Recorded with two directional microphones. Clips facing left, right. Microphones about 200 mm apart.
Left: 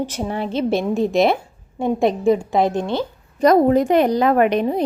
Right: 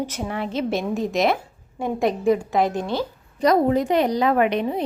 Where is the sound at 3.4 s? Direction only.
50° left (ahead or behind).